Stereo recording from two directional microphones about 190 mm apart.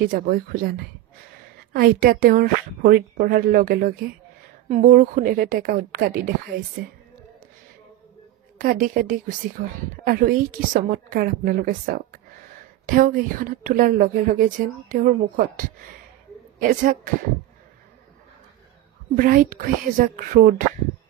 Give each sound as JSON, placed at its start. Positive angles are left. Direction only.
{"t": 0.0, "sound": "a woman's voice", "side_deg": -50}
{"t": 8.5, "sound": "a woman's voice", "side_deg": -45}
{"t": 16.6, "sound": "a woman's voice", "side_deg": -45}
{"t": 19.1, "sound": "a woman's voice", "side_deg": -45}